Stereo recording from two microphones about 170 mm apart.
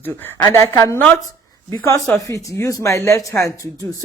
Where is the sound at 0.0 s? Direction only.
10° left (ahead or behind).